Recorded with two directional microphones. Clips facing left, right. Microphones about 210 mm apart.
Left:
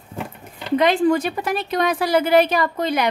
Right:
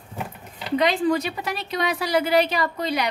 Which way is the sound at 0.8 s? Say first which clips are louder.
Left 4 dB; 50° left (ahead or behind).